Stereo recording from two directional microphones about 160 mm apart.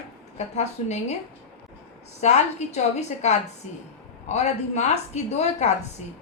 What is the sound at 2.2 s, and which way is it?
Speech, 45° left (ahead or behind).